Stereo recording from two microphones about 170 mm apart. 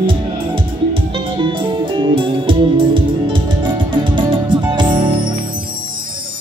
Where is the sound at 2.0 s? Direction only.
30° right (ahead or behind).